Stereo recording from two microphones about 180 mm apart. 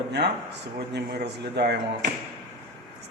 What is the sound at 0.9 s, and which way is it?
Speech, 70° right (ahead or behind).